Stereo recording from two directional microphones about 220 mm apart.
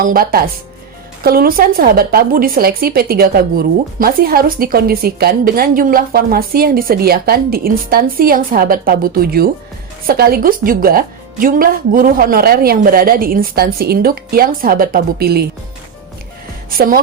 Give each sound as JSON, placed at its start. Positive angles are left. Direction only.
{"t": 0.0, "sound": "a woman's voice", "side_deg": -40}
{"t": 16.6, "sound": "speech", "side_deg": -40}